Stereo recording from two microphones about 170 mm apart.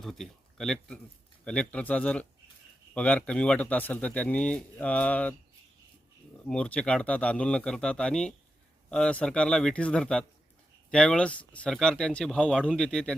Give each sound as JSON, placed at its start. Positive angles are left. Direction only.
{"t": 0.0, "sound": "speech", "side_deg": 0}
{"t": 6.5, "sound": "speech", "side_deg": 5}